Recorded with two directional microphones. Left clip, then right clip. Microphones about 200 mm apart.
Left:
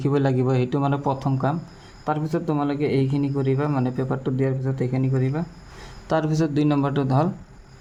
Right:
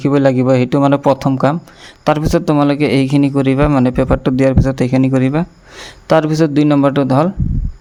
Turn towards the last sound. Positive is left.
turn(degrees=-35)  # may be behind; listen again after turning